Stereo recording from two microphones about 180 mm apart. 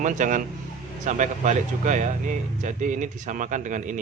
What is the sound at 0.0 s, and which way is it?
Speech, 45° right (ahead or behind).